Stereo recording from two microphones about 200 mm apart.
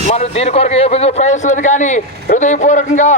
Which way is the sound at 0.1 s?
30° left (ahead or behind).